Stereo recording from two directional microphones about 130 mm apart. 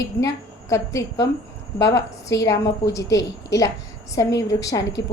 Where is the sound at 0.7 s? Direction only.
25° left (ahead or behind).